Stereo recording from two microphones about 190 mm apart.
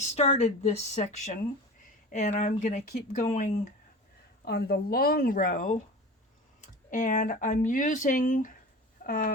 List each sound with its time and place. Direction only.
0.0 s speech: 35° left (ahead or behind)
4.4 s speech: 55° left (ahead or behind)